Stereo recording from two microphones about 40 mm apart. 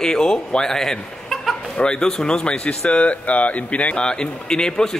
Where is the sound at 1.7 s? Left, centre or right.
Left.